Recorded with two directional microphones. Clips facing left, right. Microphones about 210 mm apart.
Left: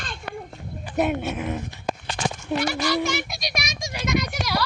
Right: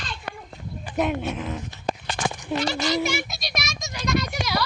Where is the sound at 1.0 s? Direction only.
5° left (ahead or behind).